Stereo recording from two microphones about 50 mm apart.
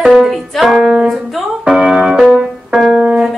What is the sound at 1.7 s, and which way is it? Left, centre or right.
Music, centre.